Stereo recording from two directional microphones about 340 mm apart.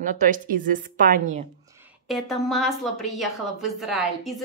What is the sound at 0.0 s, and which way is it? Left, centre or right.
Speech, right.